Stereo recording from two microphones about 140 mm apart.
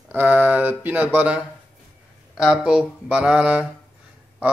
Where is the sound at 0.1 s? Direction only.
15° right (ahead or behind).